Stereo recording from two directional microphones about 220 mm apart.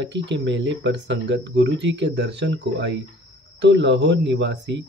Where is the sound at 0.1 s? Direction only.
55° right (ahead or behind).